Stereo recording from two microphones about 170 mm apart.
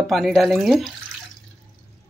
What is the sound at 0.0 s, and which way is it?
Speech, centre (ahead or behind).